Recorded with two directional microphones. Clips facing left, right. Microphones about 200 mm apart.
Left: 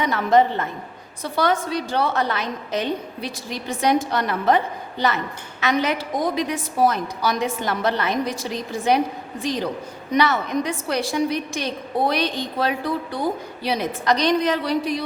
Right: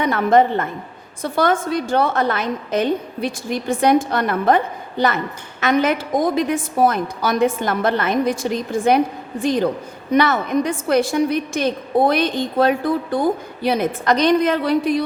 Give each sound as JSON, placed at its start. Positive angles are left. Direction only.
{"t": 0.0, "sound": "a woman's voice", "side_deg": -55}